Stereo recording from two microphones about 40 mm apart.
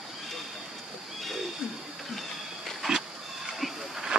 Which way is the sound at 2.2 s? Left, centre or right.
Centre.